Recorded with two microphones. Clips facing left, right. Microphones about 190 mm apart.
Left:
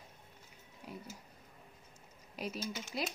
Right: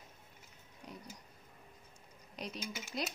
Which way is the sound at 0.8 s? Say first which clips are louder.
Left 3 dB; 5° left (ahead or behind).